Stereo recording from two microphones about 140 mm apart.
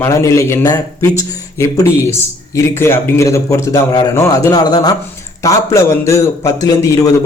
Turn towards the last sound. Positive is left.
turn(degrees=25)  # may be behind; listen again after turning